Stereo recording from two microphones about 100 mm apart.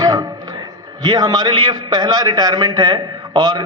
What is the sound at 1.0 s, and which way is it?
A man's voice, 40° right (ahead or behind).